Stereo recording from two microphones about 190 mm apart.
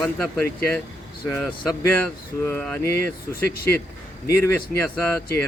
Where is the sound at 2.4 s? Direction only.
10° left (ahead or behind).